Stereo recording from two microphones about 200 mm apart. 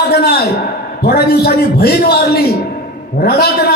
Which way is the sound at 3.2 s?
50° left (ahead or behind).